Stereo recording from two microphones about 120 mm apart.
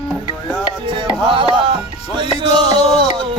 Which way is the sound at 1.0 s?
45° right (ahead or behind).